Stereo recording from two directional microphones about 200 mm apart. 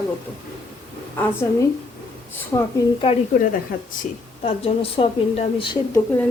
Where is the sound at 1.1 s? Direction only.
10° left (ahead or behind).